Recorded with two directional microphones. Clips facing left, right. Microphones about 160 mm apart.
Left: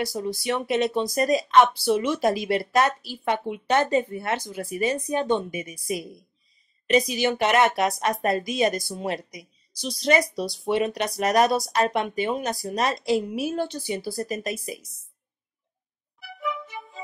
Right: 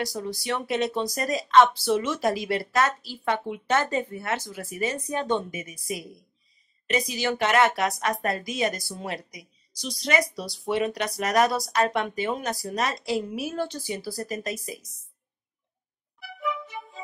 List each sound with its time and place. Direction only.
0.1 s speech: 20° left (ahead or behind)
16.2 s music: centre (ahead or behind)